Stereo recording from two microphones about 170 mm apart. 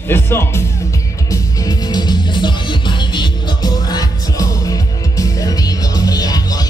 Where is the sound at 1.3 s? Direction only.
20° left (ahead or behind).